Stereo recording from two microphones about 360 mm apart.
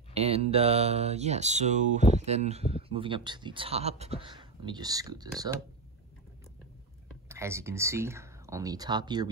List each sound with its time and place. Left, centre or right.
0.1 s mantra: centre
7.2 s speech: centre